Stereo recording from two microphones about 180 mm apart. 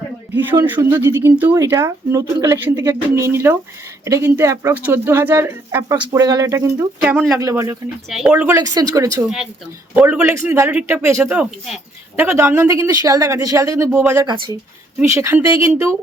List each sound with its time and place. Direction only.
0.3 s speech: 10° right (ahead or behind)
8.5 s speech: 20° right (ahead or behind)
9.9 s speech: 10° right (ahead or behind)